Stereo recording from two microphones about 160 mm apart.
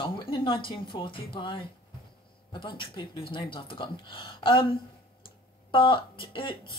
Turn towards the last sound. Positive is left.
turn(degrees=30)  # may be behind; listen again after turning